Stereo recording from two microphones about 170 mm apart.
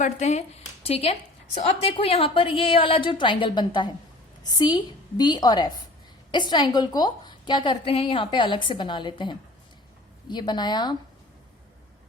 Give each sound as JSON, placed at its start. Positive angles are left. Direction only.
{"t": 0.0, "sound": "a woman's voice", "side_deg": 40}